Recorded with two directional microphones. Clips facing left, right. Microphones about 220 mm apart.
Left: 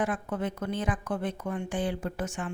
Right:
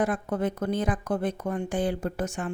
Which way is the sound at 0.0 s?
40° right (ahead or behind).